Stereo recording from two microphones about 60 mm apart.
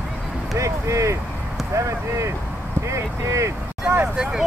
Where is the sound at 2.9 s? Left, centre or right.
Right.